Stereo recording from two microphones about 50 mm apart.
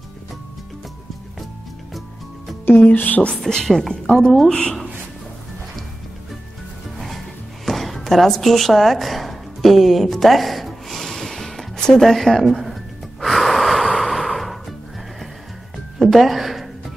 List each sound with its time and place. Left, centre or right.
2.7 s speech: left
3.3 s speech: centre
3.9 s a woman's voice: centre
7.6 s a sound: centre
13.2 s gasp: centre
13.9 s horse: centre
16.0 s music: centre